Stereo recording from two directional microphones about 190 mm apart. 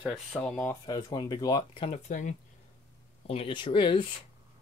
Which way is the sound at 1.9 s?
40° left (ahead or behind).